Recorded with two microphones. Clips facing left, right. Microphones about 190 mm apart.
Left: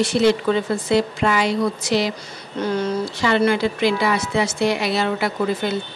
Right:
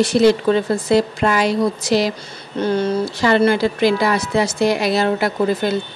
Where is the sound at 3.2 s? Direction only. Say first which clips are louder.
Right 3 dB; 40° right (ahead or behind).